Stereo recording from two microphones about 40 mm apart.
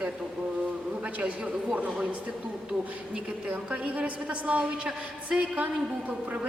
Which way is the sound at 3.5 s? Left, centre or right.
Right.